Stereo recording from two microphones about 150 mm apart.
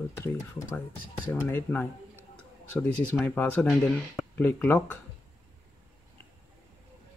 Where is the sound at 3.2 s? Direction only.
10° left (ahead or behind).